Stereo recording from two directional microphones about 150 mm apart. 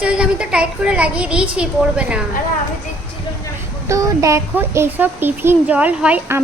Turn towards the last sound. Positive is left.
turn(degrees=-10)  # may be behind; listen again after turning